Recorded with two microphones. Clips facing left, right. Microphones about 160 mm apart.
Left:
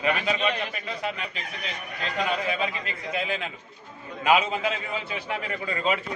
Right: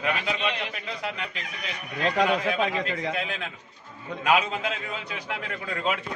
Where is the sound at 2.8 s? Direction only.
90° right.